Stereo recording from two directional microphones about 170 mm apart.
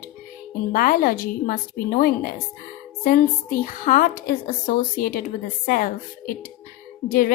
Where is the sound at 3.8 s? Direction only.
55° left (ahead or behind).